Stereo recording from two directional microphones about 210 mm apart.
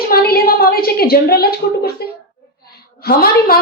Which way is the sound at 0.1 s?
45° left (ahead or behind).